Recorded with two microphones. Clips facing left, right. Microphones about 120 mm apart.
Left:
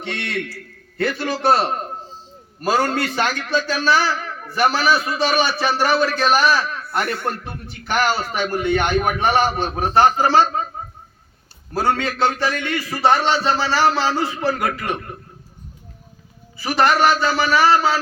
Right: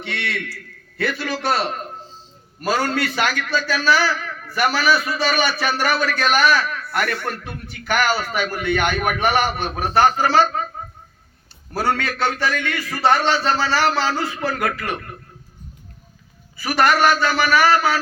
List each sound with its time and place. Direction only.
0.0 s a man's voice: 40° left (ahead or behind)
1.1 s a man's voice: 30° left (ahead or behind)
11.7 s a man's voice: 25° left (ahead or behind)
16.6 s a man's voice: 25° left (ahead or behind)